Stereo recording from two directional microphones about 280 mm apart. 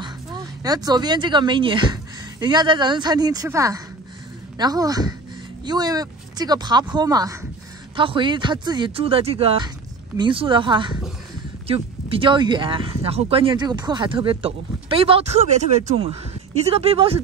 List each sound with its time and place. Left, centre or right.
0.7 s speech: centre